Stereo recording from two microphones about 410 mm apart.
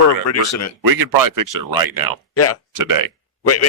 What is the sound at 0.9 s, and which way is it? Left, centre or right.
Speech, right.